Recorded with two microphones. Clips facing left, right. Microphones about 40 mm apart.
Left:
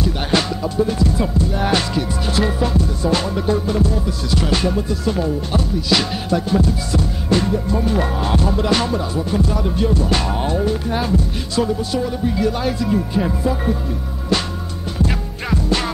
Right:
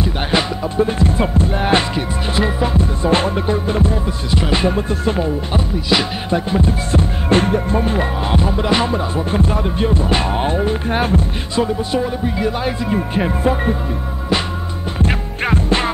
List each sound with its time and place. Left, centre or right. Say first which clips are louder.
0.0 s music: right 1 dB; centre
0.7 s music: right 2 dB; right
8.0 s music: right 1 dB; right
11.5 s speech: right 2 dB; right
13.1 s music: right 2 dB; right
15.0 s music: right 3 dB; right